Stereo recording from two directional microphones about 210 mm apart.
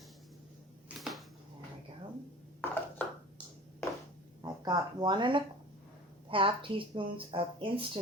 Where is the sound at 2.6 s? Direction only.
10° left (ahead or behind).